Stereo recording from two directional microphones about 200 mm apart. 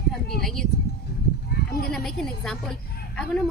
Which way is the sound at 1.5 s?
50° left (ahead or behind).